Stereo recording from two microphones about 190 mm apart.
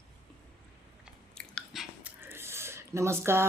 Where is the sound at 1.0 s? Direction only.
5° left (ahead or behind).